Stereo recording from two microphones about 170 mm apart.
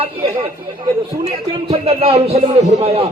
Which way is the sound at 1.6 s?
35° right (ahead or behind).